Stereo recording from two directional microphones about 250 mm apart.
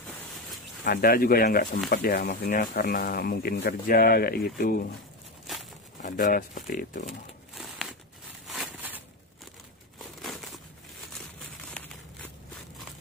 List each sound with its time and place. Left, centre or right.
0.8 s speech: left
5.5 s a sound: centre
6.0 s speech: left
7.5 s crumpling: centre
8.5 s a sound: centre
9.9 s crumpling: centre